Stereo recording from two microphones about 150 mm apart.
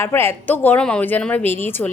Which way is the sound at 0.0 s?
15° left (ahead or behind).